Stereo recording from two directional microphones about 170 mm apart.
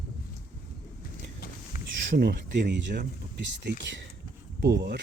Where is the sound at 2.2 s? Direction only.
85° right.